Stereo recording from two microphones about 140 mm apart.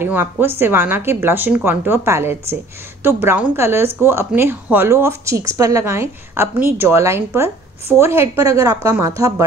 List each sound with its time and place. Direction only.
0.0 s a woman's voice: 15° right (ahead or behind)